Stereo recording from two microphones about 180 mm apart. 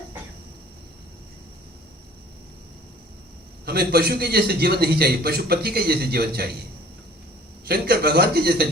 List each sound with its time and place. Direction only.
3.7 s a man's voice: 60° right (ahead or behind)
7.7 s a man's voice: 60° right (ahead or behind)